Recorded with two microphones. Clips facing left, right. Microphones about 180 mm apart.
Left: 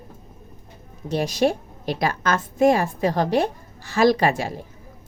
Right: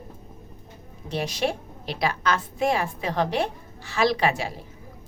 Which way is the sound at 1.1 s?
40° left (ahead or behind).